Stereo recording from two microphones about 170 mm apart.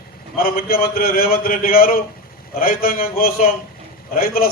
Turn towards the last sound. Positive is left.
turn(degrees=60)  # may be behind; listen again after turning